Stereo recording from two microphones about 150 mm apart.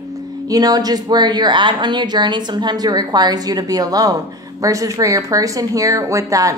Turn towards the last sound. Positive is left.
turn(degrees=-20)  # may be behind; listen again after turning